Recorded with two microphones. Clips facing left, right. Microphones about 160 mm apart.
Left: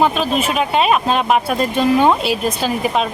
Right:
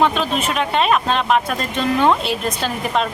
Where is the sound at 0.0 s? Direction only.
5° left (ahead or behind).